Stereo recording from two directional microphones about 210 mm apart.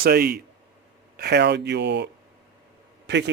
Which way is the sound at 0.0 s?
50° right (ahead or behind).